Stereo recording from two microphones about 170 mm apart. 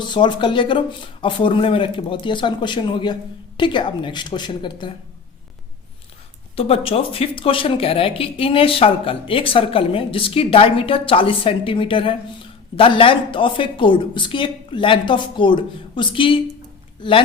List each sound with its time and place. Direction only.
0.0 s speech: 25° left (ahead or behind)
6.6 s a woman's voice: 35° left (ahead or behind)